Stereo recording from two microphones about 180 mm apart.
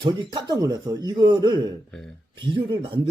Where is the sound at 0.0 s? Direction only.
25° right (ahead or behind).